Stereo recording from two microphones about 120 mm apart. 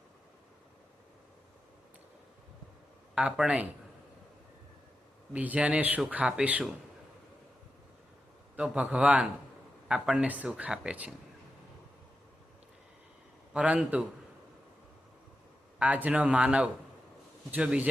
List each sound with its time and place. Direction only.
3.2 s speech: 5° right (ahead or behind)
5.3 s speech: 10° right (ahead or behind)
8.5 s speech: 10° right (ahead or behind)
13.5 s speech: 10° right (ahead or behind)
15.8 s speech: 10° right (ahead or behind)